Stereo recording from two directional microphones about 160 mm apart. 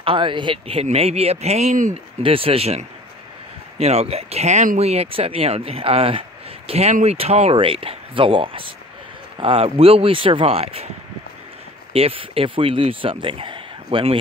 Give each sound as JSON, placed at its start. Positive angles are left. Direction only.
{"t": 0.0, "sound": "speech", "side_deg": -30}
{"t": 2.2, "sound": "speech", "side_deg": -35}
{"t": 11.9, "sound": "speech", "side_deg": -35}